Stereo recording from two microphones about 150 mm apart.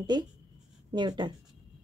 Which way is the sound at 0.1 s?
30° right (ahead or behind).